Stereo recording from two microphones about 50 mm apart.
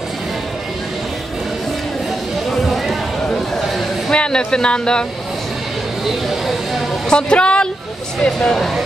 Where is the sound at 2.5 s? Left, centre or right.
Centre.